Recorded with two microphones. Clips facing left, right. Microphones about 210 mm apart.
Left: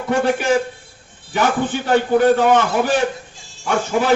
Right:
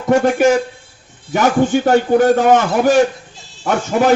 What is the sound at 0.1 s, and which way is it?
A man's voice, 45° right (ahead or behind).